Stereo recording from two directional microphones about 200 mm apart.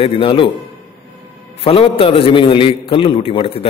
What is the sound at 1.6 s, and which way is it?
A man's voice, 30° left (ahead or behind).